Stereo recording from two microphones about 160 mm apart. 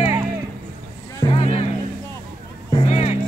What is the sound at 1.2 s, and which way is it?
Music, 35° left (ahead or behind).